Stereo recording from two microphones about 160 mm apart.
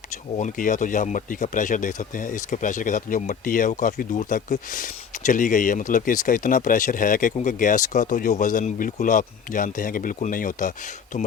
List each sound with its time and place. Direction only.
0.3 s speech: 55° left (ahead or behind)